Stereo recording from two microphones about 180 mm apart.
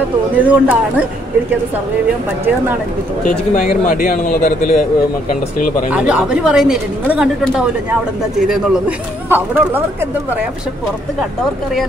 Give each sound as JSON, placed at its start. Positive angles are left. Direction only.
{"t": 0.4, "sound": "a man's voice", "side_deg": -10}
{"t": 3.3, "sound": "speech", "side_deg": 45}
{"t": 5.9, "sound": "a woman's voice", "side_deg": -5}